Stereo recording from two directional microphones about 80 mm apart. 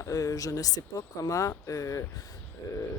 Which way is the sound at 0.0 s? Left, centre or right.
Left.